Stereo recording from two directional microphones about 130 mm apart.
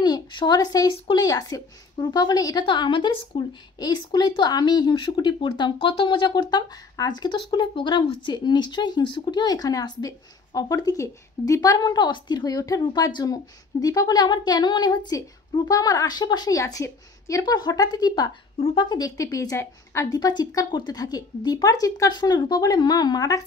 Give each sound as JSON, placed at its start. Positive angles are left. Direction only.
{"t": 0.0, "sound": "a woman's voice", "side_deg": 35}